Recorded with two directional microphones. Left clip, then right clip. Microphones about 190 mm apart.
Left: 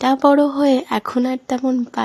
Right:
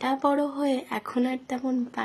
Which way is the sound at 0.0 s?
45° left (ahead or behind).